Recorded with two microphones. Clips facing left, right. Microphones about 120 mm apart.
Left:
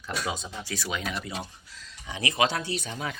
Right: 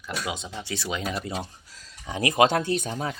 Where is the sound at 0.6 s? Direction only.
25° right (ahead or behind).